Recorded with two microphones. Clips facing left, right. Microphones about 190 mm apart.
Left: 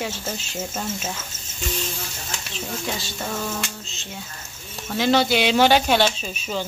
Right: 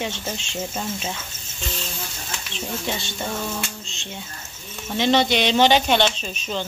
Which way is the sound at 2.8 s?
Centre (ahead or behind).